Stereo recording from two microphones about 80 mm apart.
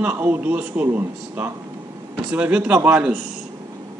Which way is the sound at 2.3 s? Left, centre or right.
Centre.